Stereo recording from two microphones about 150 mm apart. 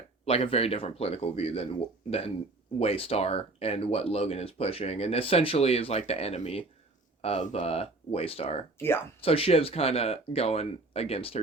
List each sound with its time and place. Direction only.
0.3 s speech: 40° left (ahead or behind)